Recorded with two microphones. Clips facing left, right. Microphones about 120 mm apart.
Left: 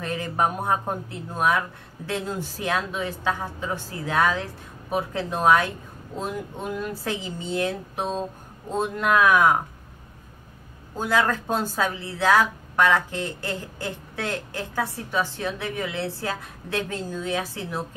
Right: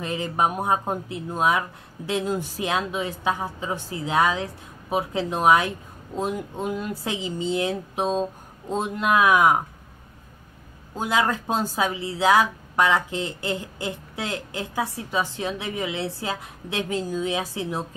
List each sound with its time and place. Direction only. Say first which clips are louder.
0.0 s a woman's voice: right 1 dB; 20° right (ahead or behind)
11.0 s a woman's voice: even; 15° right (ahead or behind)